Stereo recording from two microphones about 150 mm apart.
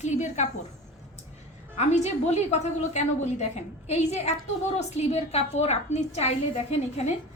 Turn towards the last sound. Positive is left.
turn(degrees=45)  # may be behind; listen again after turning